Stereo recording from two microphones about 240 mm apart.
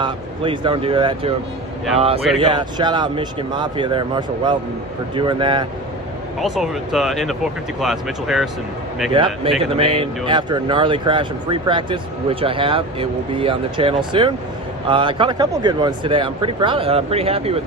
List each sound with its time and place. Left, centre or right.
0.0 s speech: centre
6.4 s speech: centre
9.1 s speech: right